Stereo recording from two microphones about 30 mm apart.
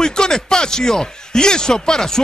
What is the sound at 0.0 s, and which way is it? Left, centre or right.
Speech, left.